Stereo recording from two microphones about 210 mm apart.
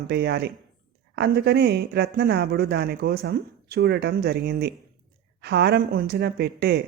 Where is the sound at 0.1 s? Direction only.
50° right (ahead or behind).